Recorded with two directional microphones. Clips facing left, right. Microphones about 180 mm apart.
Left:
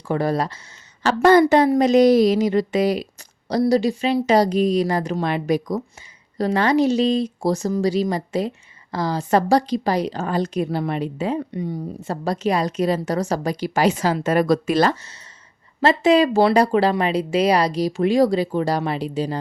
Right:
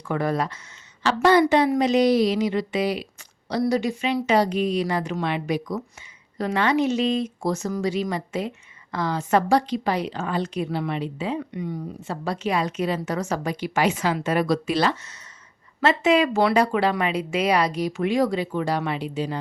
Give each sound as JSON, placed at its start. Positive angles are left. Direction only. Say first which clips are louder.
{"t": 0.1, "sound": "speech", "louder": "left 3 dB", "side_deg": 35}
{"t": 1.0, "sound": "speech", "louder": "left 4 dB", "side_deg": 45}